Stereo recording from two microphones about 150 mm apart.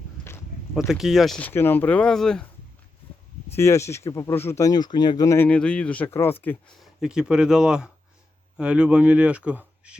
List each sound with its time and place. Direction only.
0.8 s speech: centre (ahead or behind)
3.5 s speech: 20° left (ahead or behind)
5.5 s speech: 5° left (ahead or behind)
6.7 s speech: 5° right (ahead or behind)